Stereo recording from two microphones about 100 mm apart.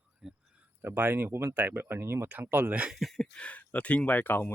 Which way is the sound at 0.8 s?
20° right (ahead or behind).